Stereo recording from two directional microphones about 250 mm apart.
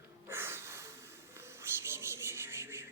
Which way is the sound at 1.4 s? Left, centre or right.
Centre.